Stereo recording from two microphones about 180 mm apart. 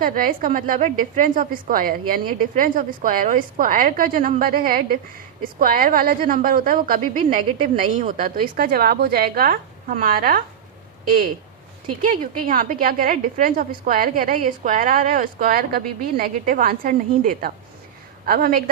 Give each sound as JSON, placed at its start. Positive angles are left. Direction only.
{"t": 0.0, "sound": "a woman's voice", "side_deg": -50}
{"t": 12.0, "sound": "a woman's voice", "side_deg": -50}